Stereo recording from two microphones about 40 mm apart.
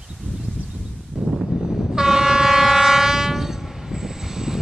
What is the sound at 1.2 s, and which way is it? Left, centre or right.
Vehicle, centre.